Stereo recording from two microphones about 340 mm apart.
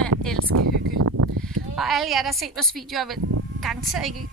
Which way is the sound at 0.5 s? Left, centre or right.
Right.